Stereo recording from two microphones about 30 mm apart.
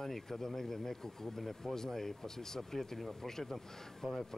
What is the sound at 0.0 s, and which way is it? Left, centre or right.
Speech, centre.